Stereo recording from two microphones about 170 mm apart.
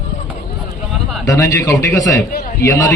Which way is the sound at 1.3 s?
20° left (ahead or behind).